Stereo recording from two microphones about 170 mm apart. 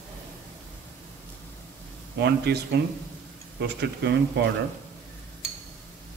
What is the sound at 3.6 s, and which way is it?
Speech, 85° right.